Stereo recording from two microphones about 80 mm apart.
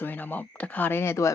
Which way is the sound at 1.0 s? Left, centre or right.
Left.